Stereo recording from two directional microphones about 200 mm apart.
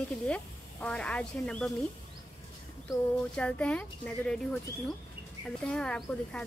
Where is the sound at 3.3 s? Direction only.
5° left (ahead or behind).